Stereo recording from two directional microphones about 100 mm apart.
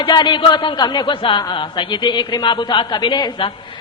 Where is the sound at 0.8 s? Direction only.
45° left (ahead or behind).